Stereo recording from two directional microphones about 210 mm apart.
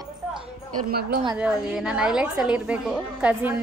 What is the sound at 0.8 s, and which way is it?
Speech, 45° right (ahead or behind).